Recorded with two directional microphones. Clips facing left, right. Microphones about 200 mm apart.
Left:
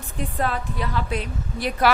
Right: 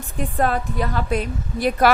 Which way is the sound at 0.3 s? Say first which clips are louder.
Right 5 dB; 45° right (ahead or behind).